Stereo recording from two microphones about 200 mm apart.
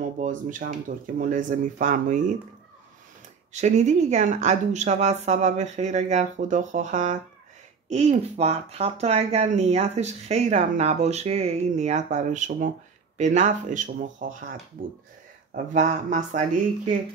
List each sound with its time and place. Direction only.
0.0 s speech: 40° right (ahead or behind)
3.5 s speech: 35° right (ahead or behind)